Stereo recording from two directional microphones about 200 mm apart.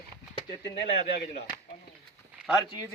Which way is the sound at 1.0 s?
50° left (ahead or behind).